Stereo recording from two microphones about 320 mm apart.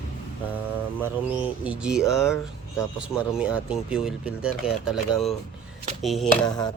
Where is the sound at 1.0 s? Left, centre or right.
Centre.